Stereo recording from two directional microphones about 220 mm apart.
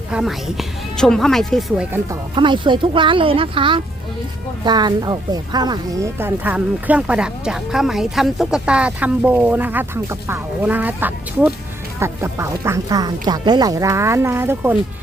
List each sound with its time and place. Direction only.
0.1 s a woman's voice: centre (ahead or behind)
2.3 s speech: 20° right (ahead or behind)